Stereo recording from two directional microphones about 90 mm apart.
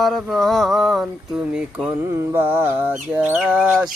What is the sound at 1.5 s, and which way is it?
Mantra, 10° right (ahead or behind).